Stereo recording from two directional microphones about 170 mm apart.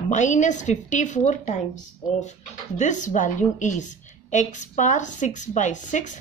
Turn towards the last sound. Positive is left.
turn(degrees=45)  # may be behind; listen again after turning